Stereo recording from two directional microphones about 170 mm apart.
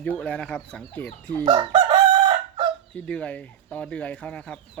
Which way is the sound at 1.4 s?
30° right (ahead or behind).